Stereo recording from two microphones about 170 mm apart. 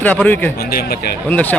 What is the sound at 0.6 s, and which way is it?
Speech, 65° left (ahead or behind).